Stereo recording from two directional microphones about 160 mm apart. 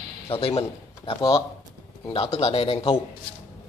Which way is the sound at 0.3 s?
35° left (ahead or behind).